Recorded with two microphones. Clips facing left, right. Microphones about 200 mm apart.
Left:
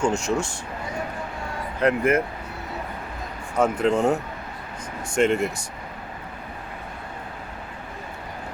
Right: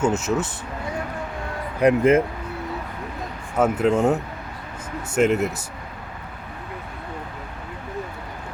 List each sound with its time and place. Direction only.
0.0 s speech: 5° right (ahead or behind)
1.8 s speech: 20° right (ahead or behind)
3.6 s speech: 5° right (ahead or behind)